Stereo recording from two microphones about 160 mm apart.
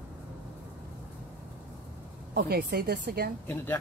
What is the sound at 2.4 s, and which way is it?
Speech, 75° right (ahead or behind).